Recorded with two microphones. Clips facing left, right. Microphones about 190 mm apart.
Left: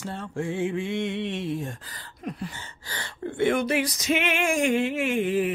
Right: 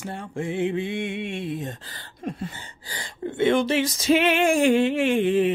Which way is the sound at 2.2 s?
25° right (ahead or behind).